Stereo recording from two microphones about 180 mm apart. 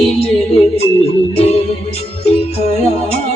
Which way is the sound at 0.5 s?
35° left (ahead or behind).